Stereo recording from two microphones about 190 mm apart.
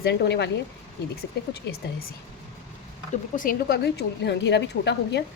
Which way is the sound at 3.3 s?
45° left (ahead or behind).